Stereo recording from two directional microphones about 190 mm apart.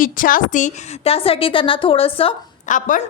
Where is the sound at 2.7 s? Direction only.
45° left (ahead or behind).